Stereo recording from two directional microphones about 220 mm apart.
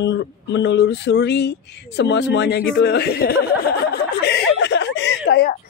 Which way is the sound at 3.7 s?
45° left (ahead or behind).